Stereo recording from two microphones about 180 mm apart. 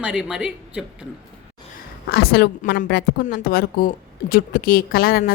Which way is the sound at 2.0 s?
65° left (ahead or behind).